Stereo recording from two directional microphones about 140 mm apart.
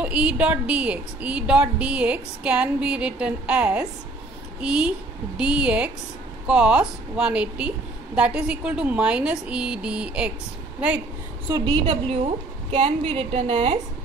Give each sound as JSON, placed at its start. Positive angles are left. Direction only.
{"t": 0.0, "sound": "a woman's voice", "side_deg": -10}
{"t": 11.4, "sound": "a woman's voice", "side_deg": -25}
{"t": 12.7, "sound": "a woman's voice", "side_deg": -45}